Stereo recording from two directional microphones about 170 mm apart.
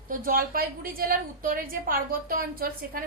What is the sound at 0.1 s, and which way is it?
A woman's voice, 55° right (ahead or behind).